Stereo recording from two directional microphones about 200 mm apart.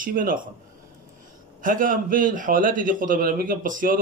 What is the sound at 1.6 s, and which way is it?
A man's voice, 40° right (ahead or behind).